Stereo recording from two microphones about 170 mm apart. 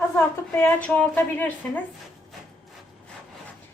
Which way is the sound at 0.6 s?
10° left (ahead or behind).